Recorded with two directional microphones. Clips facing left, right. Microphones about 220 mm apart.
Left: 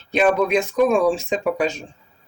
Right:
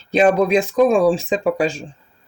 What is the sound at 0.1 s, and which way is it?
Speech, 35° right (ahead or behind).